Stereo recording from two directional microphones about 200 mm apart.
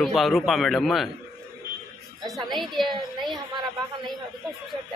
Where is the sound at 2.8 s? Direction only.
25° right (ahead or behind).